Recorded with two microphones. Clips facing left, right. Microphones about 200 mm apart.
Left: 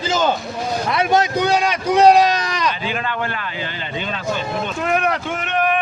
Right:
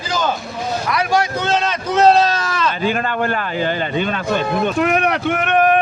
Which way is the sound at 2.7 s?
45° right (ahead or behind).